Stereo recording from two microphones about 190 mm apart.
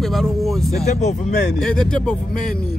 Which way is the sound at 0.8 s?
35° left (ahead or behind).